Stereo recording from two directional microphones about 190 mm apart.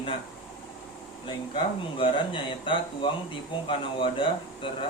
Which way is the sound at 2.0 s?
25° left (ahead or behind).